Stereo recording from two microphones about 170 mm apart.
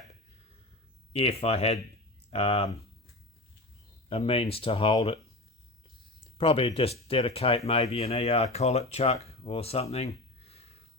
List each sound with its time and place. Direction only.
1.1 s speech: 35° left (ahead or behind)
4.1 s speech: 35° left (ahead or behind)
6.3 s speech: 35° left (ahead or behind)